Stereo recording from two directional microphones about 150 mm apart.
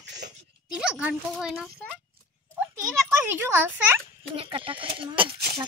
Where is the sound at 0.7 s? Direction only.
5° right (ahead or behind).